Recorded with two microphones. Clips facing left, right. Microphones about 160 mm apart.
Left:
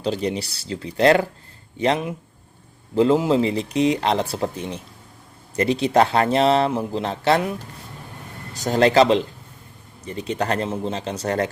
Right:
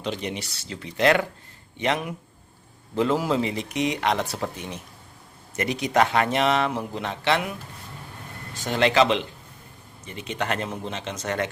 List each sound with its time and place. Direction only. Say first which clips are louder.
0.0 s speech: left 6 dB; 35° left (ahead or behind)
8.5 s speech: left 5 dB; 40° left (ahead or behind)